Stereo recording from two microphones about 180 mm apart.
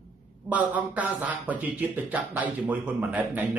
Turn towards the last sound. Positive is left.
turn(degrees=-10)  # may be behind; listen again after turning